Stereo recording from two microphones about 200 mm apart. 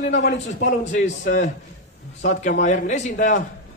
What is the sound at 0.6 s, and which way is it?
A man's voice, 40° left (ahead or behind).